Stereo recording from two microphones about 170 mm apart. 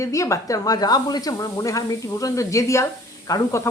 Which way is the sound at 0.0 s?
20° left (ahead or behind).